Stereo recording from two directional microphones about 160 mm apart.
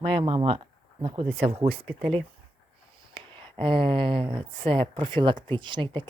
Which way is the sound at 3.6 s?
35° right (ahead or behind).